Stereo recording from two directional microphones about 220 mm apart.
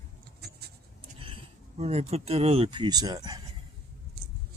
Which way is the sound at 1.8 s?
30° right (ahead or behind).